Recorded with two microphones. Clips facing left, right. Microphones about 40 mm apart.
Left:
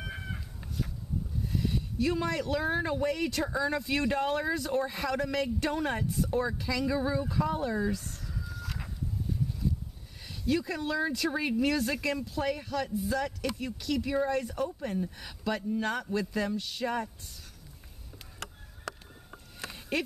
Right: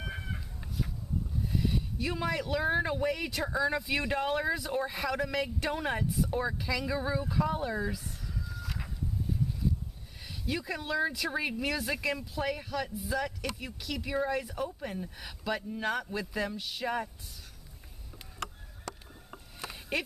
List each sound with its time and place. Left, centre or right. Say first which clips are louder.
0.0 s chicken: even; centre
1.4 s speech: right 1 dB; centre
10.2 s speech: left 5 dB; centre
19.3 s a sound: even; centre